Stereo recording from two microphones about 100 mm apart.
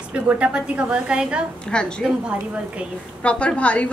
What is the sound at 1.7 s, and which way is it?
Speech, 10° left (ahead or behind).